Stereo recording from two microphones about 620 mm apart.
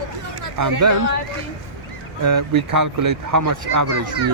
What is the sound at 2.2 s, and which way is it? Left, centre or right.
Speech, right.